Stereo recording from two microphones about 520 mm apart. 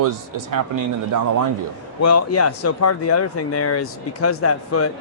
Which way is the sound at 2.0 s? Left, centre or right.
Left.